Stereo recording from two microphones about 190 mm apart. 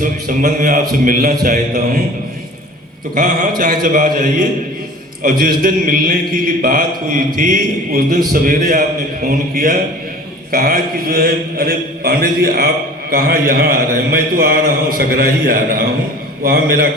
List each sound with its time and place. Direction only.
0.0 s mantra: 45° right (ahead or behind)
3.2 s mantra: 45° right (ahead or behind)
10.5 s mantra: 50° right (ahead or behind)